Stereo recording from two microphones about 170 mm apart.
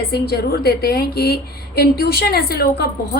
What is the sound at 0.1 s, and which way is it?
A woman's voice, 65° left (ahead or behind).